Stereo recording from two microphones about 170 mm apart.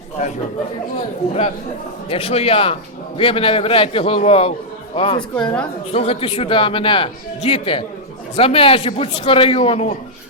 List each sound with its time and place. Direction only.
2.0 s speech: 35° left (ahead or behind)
5.4 s a woman's voice: 5° left (ahead or behind)
5.9 s speech: 35° left (ahead or behind)